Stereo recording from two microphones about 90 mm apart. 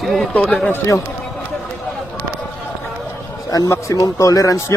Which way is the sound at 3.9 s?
40° left (ahead or behind).